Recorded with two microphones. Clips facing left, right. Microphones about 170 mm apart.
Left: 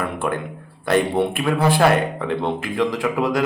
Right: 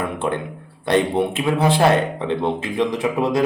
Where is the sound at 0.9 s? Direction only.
20° right (ahead or behind).